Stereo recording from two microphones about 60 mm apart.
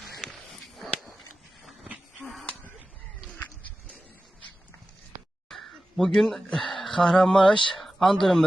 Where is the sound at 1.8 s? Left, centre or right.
Centre.